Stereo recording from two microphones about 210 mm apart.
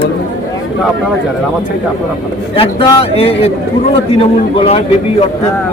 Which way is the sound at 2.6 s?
25° left (ahead or behind).